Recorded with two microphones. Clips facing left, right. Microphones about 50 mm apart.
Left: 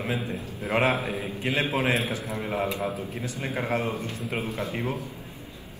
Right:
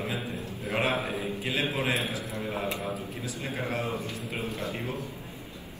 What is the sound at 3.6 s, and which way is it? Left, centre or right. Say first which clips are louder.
A man's voice: left 4 dB; left.